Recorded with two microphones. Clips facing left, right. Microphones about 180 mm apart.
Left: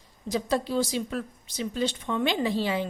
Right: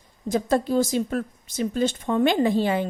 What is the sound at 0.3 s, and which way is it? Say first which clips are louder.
A woman's voice: right 5 dB; 50° right (ahead or behind).